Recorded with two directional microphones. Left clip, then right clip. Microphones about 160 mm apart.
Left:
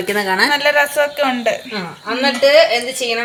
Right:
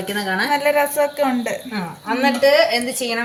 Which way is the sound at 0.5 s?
5° right (ahead or behind).